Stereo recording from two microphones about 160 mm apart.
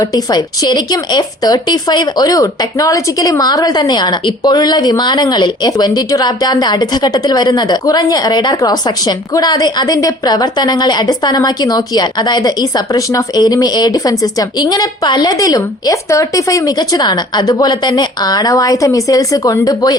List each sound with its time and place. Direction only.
0.0 s a woman's voice: 25° left (ahead or behind)